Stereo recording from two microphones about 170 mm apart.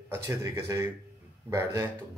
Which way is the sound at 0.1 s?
15° right (ahead or behind).